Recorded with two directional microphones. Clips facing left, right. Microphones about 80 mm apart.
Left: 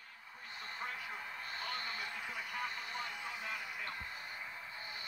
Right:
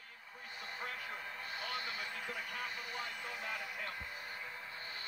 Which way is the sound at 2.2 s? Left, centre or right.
Centre.